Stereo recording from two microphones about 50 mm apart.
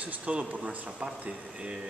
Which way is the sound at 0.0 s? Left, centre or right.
Right.